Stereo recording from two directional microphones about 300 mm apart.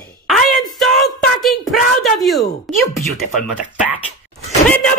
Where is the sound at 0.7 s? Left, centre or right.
Centre.